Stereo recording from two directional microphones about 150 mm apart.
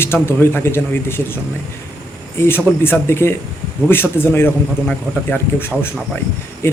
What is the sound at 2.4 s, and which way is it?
A man's voice, 15° left (ahead or behind).